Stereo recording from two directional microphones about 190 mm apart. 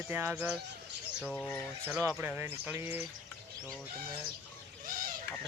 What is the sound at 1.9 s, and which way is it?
Speech, 5° right (ahead or behind).